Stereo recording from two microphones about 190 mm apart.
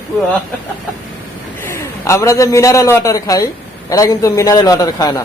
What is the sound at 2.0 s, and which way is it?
Speech, 15° left (ahead or behind).